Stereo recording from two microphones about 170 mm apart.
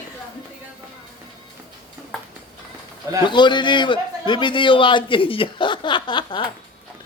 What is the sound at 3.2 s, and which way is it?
A man's voice, 25° left (ahead or behind).